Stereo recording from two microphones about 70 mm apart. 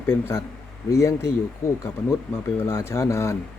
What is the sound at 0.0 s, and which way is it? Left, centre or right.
Speech, left.